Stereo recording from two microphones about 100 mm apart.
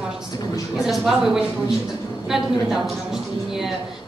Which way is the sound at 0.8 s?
5° right (ahead or behind).